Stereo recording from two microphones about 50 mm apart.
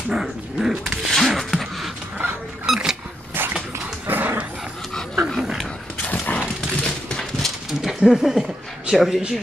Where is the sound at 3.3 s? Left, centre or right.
Right.